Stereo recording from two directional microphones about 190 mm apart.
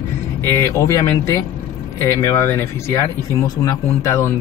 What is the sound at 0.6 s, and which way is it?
Speech, 15° left (ahead or behind).